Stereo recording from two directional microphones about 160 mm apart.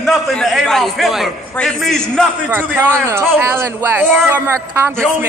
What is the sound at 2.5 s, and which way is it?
Speech, 15° right (ahead or behind).